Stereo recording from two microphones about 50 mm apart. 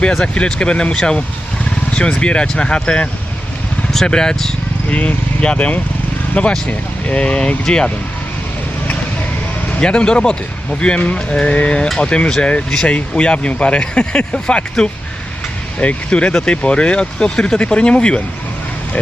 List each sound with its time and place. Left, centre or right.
0.3 s speech: centre
4.9 s speech: left
9.8 s speech: centre